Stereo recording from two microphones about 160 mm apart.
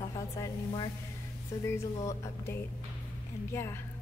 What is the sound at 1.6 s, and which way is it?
A woman's voice, 20° left (ahead or behind).